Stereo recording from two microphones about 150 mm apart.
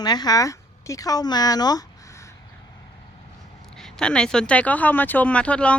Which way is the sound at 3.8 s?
5° left (ahead or behind).